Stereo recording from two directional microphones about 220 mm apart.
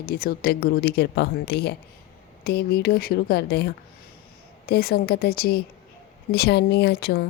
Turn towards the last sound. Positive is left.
turn(degrees=45)  # may be behind; listen again after turning